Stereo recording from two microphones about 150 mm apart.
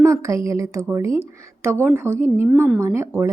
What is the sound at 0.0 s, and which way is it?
A woman's voice, 20° right (ahead or behind).